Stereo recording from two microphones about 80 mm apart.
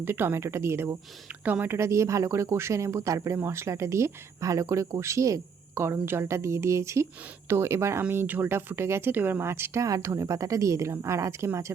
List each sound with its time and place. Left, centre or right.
0.0 s speech: right